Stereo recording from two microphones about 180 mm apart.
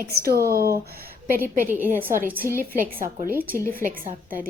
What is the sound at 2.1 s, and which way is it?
A woman's voice, 55° right (ahead or behind).